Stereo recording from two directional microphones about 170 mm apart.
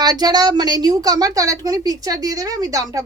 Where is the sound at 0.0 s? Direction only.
25° right (ahead or behind).